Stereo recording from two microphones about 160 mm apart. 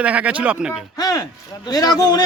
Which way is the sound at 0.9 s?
25° left (ahead or behind).